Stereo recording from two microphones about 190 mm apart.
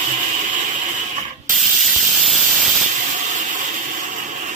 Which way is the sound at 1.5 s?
Centre (ahead or behind).